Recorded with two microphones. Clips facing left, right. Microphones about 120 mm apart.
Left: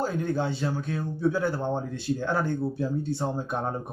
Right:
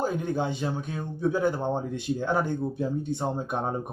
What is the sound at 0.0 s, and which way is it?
A man's voice, 15° right (ahead or behind).